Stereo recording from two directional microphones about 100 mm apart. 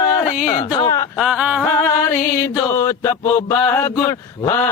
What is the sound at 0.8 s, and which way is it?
Music, 35° left (ahead or behind).